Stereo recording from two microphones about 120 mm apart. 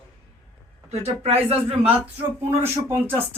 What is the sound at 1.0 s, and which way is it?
Speech, 60° right (ahead or behind).